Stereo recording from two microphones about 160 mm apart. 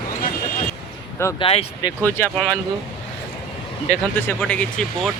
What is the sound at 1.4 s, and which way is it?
Speech, 35° left (ahead or behind).